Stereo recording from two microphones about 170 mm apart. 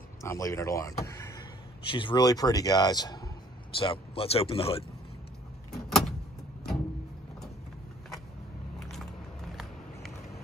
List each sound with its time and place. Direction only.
0.2 s a man's voice: 20° left (ahead or behind)
1.9 s a man's voice: 30° left (ahead or behind)
5.7 s vehicle: centre (ahead or behind)
8.9 s a sound: centre (ahead or behind)